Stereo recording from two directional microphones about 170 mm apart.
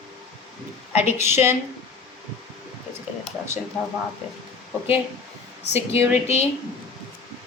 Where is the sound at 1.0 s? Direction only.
15° right (ahead or behind).